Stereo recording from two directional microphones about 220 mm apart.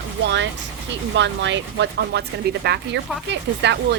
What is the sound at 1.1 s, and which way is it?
Speech, 55° right (ahead or behind).